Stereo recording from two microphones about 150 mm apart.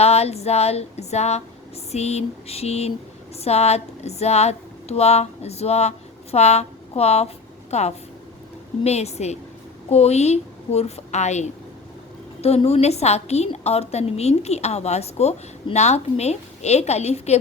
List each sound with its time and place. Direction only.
0.0 s a woman's voice: 45° left (ahead or behind)